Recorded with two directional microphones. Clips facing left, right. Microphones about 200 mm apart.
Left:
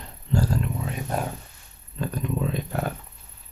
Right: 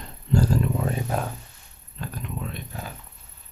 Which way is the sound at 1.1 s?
Centre (ahead or behind).